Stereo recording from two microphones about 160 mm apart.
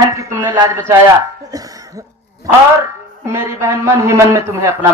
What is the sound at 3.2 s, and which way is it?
Speech, 15° right (ahead or behind).